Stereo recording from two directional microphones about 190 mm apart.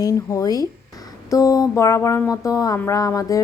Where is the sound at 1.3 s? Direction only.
20° left (ahead or behind).